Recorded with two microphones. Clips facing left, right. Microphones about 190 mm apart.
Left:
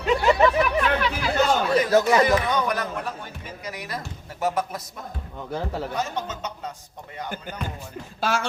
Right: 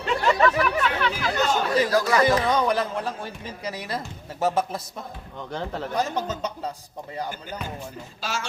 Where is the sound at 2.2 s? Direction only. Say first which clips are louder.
Right 1 dB; 25° right (ahead or behind).